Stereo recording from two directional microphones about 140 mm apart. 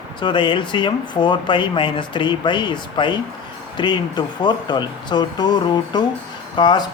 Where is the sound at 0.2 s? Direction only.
35° left (ahead or behind).